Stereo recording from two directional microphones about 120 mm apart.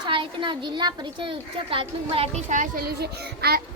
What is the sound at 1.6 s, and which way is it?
Speech, 50° right (ahead or behind).